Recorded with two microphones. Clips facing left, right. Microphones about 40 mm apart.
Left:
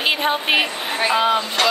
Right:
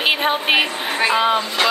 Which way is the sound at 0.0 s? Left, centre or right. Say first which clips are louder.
Right 1 dB; centre.